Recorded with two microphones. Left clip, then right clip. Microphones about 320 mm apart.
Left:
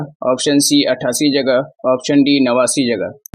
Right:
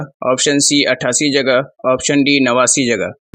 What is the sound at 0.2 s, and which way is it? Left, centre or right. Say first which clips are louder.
Speech: right 1 dB; left.